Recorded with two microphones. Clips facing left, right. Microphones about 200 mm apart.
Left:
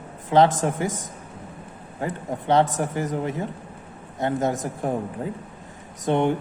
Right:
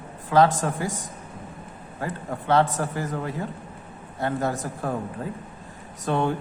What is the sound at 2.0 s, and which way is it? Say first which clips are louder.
A man's voice: left 2 dB; 20° left (ahead or behind).